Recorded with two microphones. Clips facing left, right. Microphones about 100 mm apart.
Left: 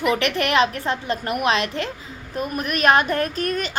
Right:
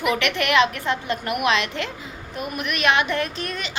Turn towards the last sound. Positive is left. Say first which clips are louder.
# left 6 dB
turn(degrees=45)  # may be behind; listen again after turning